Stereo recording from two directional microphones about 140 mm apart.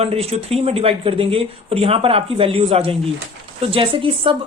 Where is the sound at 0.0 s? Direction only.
45° right (ahead or behind).